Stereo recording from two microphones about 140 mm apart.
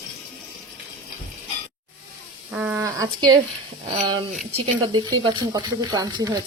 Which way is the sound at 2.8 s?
25° right (ahead or behind).